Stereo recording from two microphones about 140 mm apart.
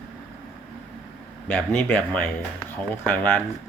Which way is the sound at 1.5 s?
15° left (ahead or behind).